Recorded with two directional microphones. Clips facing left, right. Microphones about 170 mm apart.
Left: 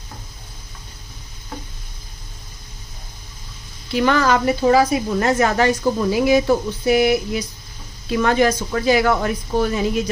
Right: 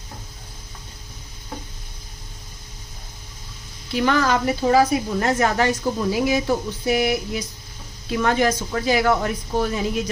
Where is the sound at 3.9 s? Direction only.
90° left.